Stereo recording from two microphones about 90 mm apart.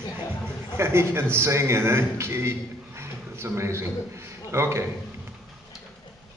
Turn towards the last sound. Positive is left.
turn(degrees=-30)  # may be behind; listen again after turning